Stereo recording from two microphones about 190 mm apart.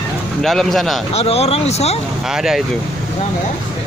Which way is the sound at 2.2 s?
Centre (ahead or behind).